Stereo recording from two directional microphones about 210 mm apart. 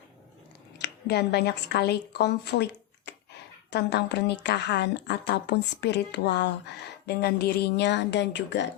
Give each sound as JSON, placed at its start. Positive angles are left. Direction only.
{"t": 0.8, "sound": "a woman's voice", "side_deg": 50}
{"t": 3.1, "sound": "a sound", "side_deg": 55}
{"t": 3.7, "sound": "a woman's voice", "side_deg": 55}